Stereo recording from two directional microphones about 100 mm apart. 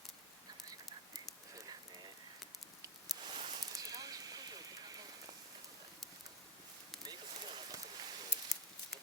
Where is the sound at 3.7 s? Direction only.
35° right (ahead or behind).